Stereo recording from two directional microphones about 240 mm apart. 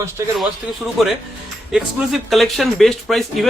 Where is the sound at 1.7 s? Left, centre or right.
Centre.